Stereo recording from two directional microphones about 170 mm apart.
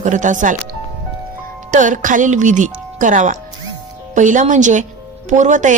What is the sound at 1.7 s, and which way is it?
A woman's voice, 50° right (ahead or behind).